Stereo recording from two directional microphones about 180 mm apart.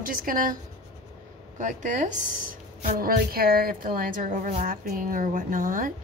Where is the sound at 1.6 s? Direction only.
40° right (ahead or behind).